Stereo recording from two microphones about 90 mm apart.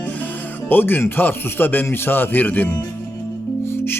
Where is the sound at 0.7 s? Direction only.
25° left (ahead or behind).